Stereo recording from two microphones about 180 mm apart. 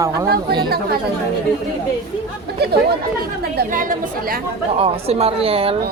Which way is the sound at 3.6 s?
50° right (ahead or behind).